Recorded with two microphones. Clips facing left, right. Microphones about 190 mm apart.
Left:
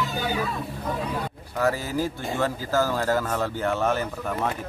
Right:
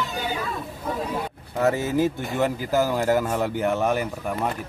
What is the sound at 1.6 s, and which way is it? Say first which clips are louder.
Speech: right 4 dB; 20° right (ahead or behind).